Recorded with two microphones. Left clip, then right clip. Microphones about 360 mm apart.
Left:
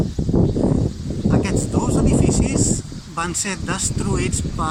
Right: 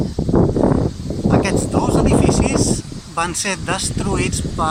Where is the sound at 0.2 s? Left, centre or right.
Right.